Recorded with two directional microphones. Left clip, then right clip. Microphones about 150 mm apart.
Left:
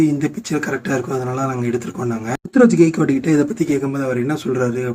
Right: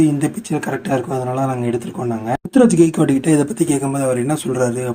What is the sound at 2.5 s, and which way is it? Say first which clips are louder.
Speech: even; 10° right (ahead or behind).